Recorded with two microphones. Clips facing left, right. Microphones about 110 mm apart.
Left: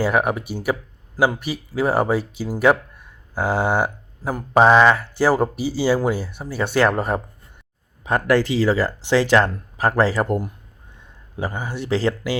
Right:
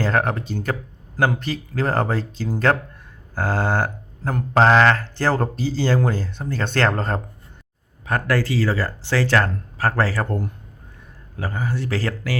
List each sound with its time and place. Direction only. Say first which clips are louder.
0.0 s speech: left 2 dB; 10° left (ahead or behind)